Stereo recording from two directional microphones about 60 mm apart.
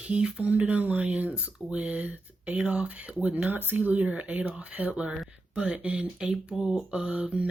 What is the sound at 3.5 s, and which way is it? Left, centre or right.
Speech, right.